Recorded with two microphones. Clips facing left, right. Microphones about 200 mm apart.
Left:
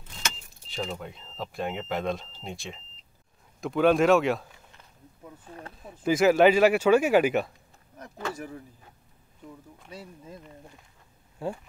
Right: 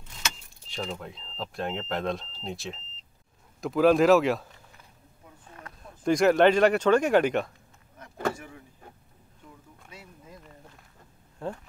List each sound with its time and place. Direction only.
0.7 s speech: 5° left (ahead or behind)
5.8 s speech: 5° left (ahead or behind)
8.4 s speech: 40° left (ahead or behind)
9.8 s speech: 30° left (ahead or behind)
11.3 s speech: 10° left (ahead or behind)